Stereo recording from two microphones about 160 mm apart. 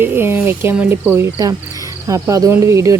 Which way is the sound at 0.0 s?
15° right (ahead or behind).